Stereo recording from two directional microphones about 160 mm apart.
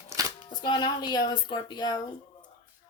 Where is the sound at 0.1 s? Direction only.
20° right (ahead or behind).